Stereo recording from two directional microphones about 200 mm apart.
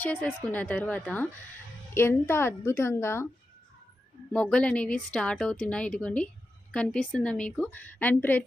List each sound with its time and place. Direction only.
0.0 s a woman's voice: 10° left (ahead or behind)
4.3 s a woman's voice: 5° left (ahead or behind)